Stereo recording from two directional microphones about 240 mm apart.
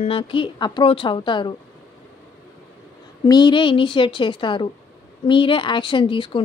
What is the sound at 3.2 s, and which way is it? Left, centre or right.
A woman's voice, centre.